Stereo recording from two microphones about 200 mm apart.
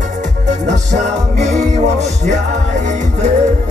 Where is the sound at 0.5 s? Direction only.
35° right (ahead or behind).